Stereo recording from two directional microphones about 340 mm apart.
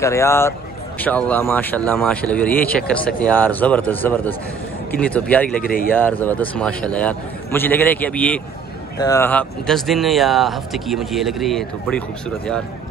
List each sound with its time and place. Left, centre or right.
0.0 s speech: centre
5.6 s speech: left
5.9 s speech: centre